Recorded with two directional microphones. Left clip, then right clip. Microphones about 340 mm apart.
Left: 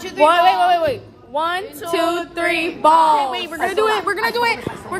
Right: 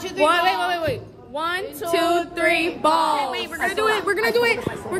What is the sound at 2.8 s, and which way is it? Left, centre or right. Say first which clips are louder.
Speech: left 10 dB; centre.